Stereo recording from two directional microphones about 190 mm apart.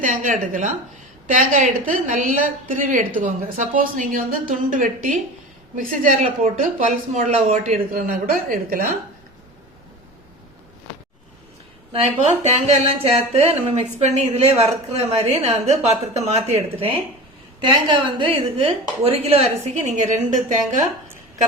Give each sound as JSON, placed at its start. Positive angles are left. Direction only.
{"t": 0.0, "sound": "a woman's voice", "side_deg": -40}
{"t": 12.5, "sound": "a woman's voice", "side_deg": -35}
{"t": 19.8, "sound": "a woman's voice", "side_deg": -40}